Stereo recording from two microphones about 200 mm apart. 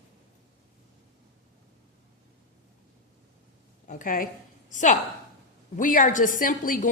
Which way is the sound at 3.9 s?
40° left (ahead or behind).